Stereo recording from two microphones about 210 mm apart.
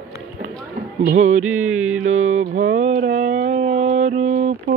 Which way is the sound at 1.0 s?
35° right (ahead or behind).